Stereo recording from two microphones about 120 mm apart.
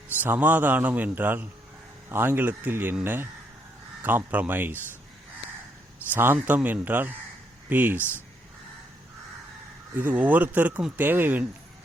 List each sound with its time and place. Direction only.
0.2 s speech: 15° right (ahead or behind)
6.1 s speech: 15° right (ahead or behind)
9.9 s speech: 15° right (ahead or behind)